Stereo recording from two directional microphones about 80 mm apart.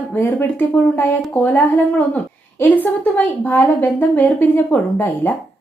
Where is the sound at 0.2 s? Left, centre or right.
Left.